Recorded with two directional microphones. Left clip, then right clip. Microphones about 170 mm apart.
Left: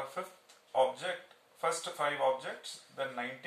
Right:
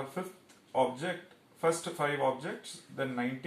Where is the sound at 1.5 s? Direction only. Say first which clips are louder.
Right 3 dB; 15° left (ahead or behind).